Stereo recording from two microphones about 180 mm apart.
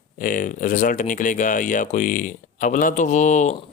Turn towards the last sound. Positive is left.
turn(degrees=40)  # may be behind; listen again after turning